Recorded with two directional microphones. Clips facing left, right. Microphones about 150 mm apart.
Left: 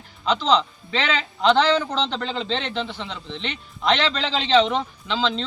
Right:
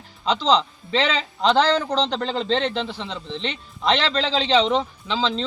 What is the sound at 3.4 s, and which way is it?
Speech, 35° right (ahead or behind).